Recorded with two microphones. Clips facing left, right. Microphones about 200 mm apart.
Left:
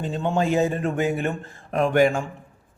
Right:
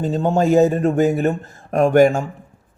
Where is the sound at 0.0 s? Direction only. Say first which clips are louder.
Right 6 dB; 40° right (ahead or behind).